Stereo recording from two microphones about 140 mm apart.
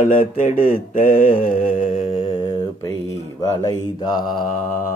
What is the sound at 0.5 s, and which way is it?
Mantra, 90° left.